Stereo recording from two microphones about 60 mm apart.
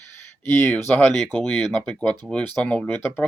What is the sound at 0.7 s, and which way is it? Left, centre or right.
Speech, left.